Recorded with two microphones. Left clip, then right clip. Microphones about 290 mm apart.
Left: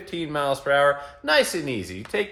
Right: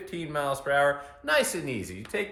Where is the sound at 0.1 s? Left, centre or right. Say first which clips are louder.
Left 5 dB; centre.